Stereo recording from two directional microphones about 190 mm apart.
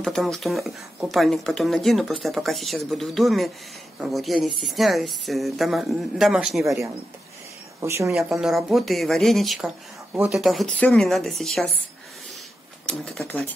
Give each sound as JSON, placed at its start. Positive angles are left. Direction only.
{"t": 0.0, "sound": "speech", "side_deg": 0}
{"t": 6.6, "sound": "speech", "side_deg": -15}
{"t": 8.1, "sound": "speech", "side_deg": -5}
{"t": 12.8, "sound": "speech", "side_deg": 5}